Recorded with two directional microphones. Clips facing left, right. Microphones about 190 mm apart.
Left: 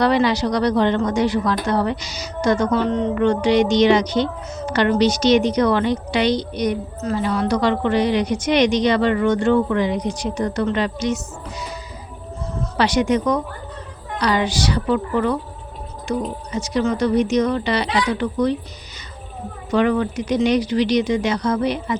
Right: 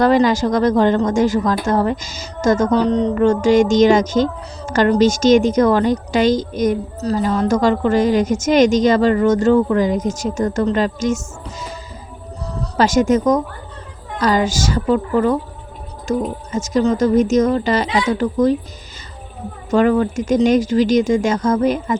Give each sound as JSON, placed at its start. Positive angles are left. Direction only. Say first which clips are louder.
{"t": 0.0, "sound": "a woman's voice", "louder": "right 4 dB", "side_deg": -45}
{"t": 12.5, "sound": "a woman's voice", "louder": "right 4 dB", "side_deg": -40}
{"t": 19.7, "sound": "a woman's voice", "louder": "right 4 dB", "side_deg": -45}